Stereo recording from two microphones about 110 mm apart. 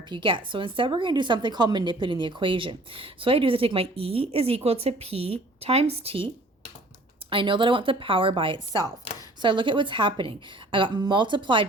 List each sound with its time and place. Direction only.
0.1 s a woman's voice: 50° right (ahead or behind)